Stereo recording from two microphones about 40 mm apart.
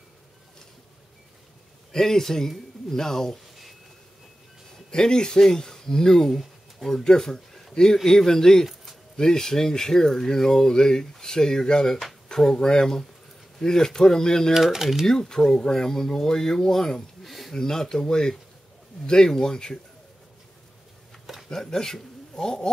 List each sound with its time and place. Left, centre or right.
1.9 s speech: centre
4.9 s speech: centre
14.5 s speech: centre
15.0 s speech: centre
17.6 s speech: centre
21.5 s speech: centre
22.3 s a sound: centre